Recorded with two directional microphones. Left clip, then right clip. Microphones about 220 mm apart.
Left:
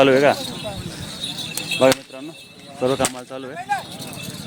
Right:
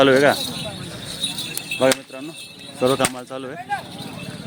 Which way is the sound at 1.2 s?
35° right (ahead or behind).